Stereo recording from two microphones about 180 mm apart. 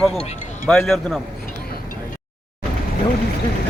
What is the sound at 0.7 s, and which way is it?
Speech, centre (ahead or behind).